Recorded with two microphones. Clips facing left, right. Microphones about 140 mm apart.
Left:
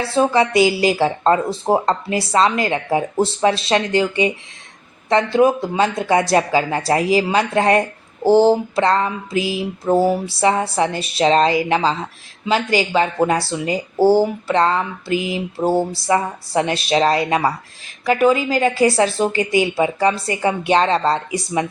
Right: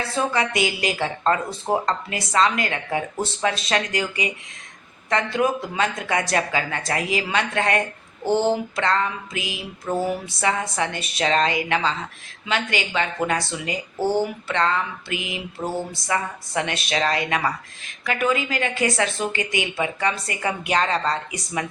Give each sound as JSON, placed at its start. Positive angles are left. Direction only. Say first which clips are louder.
{"t": 0.0, "sound": "speech", "louder": "left 7 dB", "side_deg": 30}